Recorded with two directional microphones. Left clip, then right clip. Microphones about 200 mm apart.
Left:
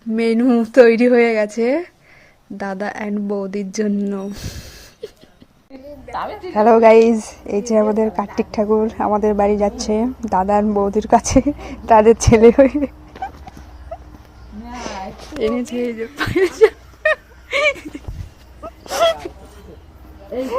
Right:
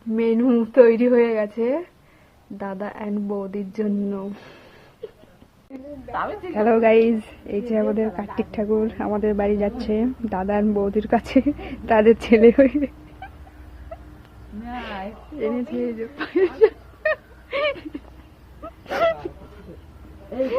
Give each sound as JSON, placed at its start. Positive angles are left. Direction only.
{"t": 0.2, "sound": "a woman's voice", "side_deg": 20}
{"t": 5.7, "sound": "a woman's voice", "side_deg": 5}
{"t": 14.7, "sound": "a sound", "side_deg": 0}
{"t": 15.4, "sound": "a woman's voice", "side_deg": 30}
{"t": 15.8, "sound": "whimper", "side_deg": 15}
{"t": 18.9, "sound": "a sound", "side_deg": -15}